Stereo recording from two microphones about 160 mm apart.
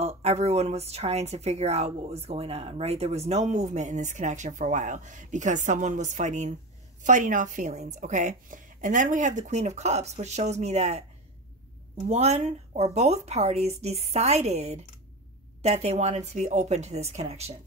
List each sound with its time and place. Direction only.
0.0 s speech: 45° right (ahead or behind)
12.1 s speech: 40° right (ahead or behind)